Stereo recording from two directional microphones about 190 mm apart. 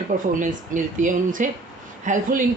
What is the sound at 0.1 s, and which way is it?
Speech, 40° right (ahead or behind).